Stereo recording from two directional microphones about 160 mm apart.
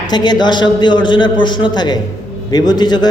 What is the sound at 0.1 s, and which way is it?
A man's voice, 25° left (ahead or behind).